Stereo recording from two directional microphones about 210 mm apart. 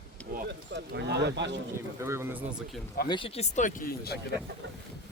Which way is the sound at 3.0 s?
25° left (ahead or behind).